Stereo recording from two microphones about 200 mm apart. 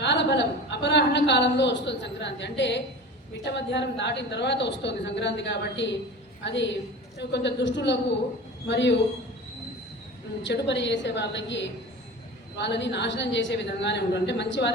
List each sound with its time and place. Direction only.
0.0 s a man's voice: 60° left (ahead or behind)
10.4 s a man's voice: 60° left (ahead or behind)